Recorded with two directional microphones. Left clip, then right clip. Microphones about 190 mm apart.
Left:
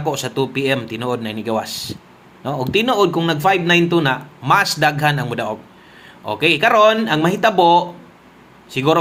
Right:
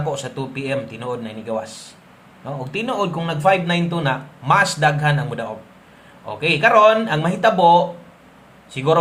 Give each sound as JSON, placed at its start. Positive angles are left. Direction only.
{"t": 0.0, "sound": "speech", "side_deg": 30}